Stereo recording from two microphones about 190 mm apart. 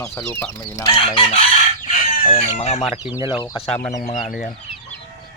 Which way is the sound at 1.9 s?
35° left (ahead or behind).